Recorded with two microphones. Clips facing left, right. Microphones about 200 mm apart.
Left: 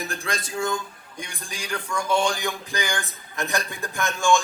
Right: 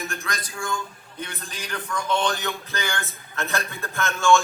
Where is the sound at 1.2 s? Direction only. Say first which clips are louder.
Right 1 dB; 10° left (ahead or behind).